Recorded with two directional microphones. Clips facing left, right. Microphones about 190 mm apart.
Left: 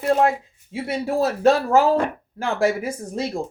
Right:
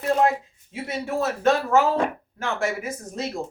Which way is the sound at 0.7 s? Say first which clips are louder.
Left 4 dB; 30° left (ahead or behind).